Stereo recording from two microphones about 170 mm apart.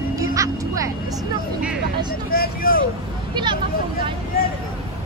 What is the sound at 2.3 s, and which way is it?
Speech, 60° left (ahead or behind).